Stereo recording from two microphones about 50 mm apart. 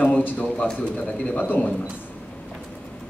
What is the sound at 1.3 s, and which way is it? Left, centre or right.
Speech, left.